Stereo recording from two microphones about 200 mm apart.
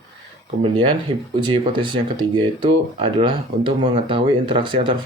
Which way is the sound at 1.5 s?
25° right (ahead or behind).